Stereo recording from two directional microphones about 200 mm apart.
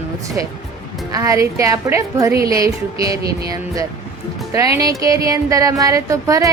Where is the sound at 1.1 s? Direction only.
15° right (ahead or behind).